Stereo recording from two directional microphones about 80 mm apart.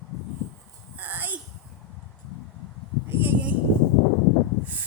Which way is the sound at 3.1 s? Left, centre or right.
Right.